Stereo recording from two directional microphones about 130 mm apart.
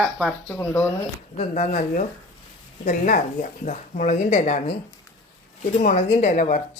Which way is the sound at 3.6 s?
80° left.